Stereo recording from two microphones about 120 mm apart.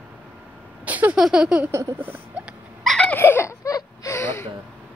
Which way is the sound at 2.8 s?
Centre (ahead or behind).